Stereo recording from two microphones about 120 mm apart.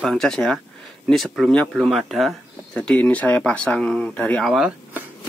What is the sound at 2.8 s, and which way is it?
Speech, 10° left (ahead or behind).